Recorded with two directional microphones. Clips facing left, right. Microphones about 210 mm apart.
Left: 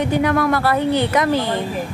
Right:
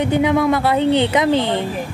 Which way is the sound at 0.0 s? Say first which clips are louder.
Right 2 dB; 20° right (ahead or behind).